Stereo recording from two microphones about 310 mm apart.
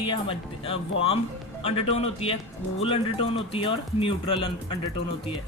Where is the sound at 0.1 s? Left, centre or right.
Centre.